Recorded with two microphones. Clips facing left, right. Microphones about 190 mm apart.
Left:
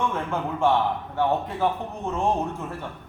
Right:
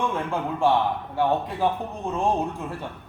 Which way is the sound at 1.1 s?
15° right (ahead or behind).